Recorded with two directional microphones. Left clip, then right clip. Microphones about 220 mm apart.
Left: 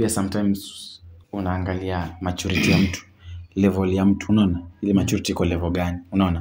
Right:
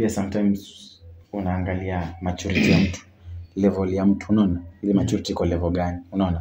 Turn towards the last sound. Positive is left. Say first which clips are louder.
# left 1 dB
turn(degrees=40)  # may be behind; listen again after turning